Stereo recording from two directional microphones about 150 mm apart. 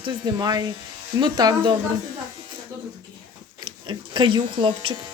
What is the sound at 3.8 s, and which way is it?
Speech, 30° right (ahead or behind).